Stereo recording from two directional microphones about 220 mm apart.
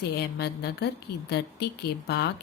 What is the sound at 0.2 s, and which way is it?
Speech, 50° left (ahead or behind).